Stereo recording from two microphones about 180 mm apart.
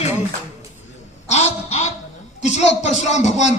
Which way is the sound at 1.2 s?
40° left (ahead or behind).